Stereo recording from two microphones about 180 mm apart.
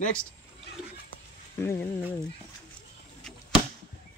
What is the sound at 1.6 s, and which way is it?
Speech, 15° left (ahead or behind).